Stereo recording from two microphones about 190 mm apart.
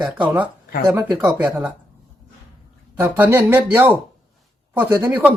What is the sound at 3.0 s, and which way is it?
Speech, 10° right (ahead or behind).